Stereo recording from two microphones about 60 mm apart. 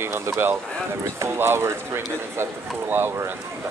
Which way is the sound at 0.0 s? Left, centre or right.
Right.